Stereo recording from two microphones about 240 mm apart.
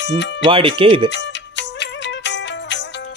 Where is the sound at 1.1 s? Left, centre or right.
Left.